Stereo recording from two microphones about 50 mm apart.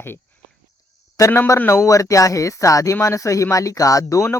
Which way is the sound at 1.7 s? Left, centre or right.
Left.